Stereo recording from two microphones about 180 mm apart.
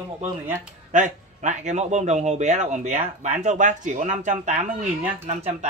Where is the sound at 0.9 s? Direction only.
40° right (ahead or behind).